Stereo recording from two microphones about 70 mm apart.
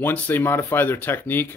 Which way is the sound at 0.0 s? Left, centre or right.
Left.